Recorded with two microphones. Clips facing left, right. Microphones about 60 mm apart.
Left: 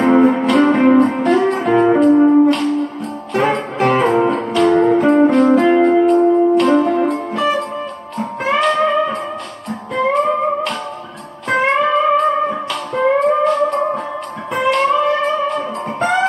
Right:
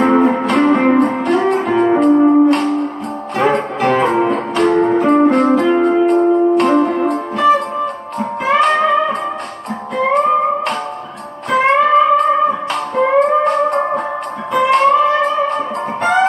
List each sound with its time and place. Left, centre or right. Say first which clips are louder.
0.0 s music: even; right
2.1 s music: even; centre
2.5 s music: right 2 dB; right
11.5 s music: right 3 dB; right